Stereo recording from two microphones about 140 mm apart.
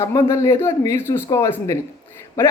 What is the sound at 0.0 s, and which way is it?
A man's voice, 20° left (ahead or behind).